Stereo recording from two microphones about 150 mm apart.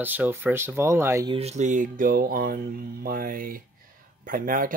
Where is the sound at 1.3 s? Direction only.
45° right (ahead or behind); by 2.6 s 75° right (ahead or behind).